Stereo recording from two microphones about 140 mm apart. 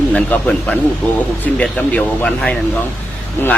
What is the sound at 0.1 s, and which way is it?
Speech, 5° left (ahead or behind).